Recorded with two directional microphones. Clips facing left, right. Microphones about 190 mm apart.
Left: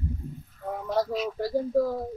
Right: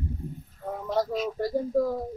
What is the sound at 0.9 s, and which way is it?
Speech, centre (ahead or behind).